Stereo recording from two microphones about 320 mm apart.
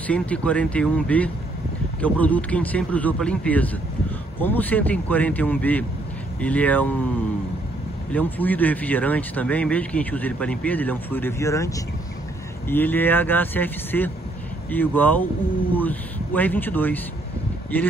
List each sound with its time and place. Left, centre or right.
0.0 s speech: centre
8.1 s speech: centre